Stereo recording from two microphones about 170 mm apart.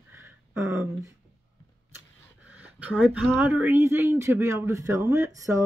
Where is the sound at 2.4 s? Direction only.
10° right (ahead or behind).